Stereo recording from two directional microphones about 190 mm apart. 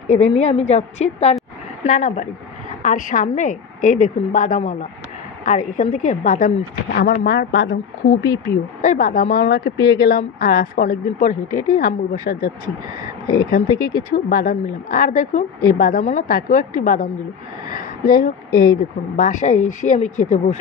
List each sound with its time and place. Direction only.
0.1 s a woman's voice: 35° left (ahead or behind)
7.2 s speech: 65° left (ahead or behind)
8.8 s speech: 45° left (ahead or behind)
13.5 s speech: 50° left (ahead or behind)